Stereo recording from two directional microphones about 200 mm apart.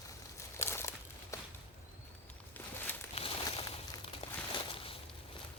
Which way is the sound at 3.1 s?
25° left (ahead or behind).